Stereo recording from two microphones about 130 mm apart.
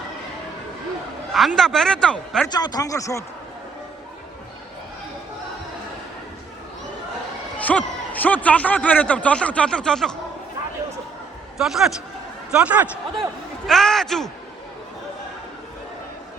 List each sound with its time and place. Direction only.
1.3 s speech: centre (ahead or behind)
2.5 s a man's voice: 30° left (ahead or behind)
7.6 s a man's voice: 10° left (ahead or behind)
11.5 s a man's voice: 5° right (ahead or behind)
13.7 s a man's voice: centre (ahead or behind)